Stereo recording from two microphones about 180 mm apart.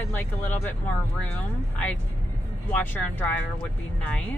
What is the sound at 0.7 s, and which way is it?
Speech, 10° left (ahead or behind).